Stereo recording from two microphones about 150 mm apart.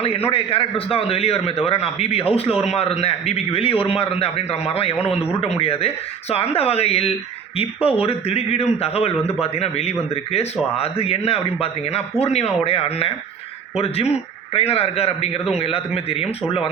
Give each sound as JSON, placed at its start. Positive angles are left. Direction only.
{"t": 0.3, "sound": "a man's voice", "side_deg": 40}